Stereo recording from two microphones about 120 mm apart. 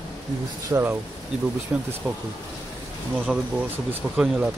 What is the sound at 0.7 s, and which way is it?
Speech, 30° right (ahead or behind).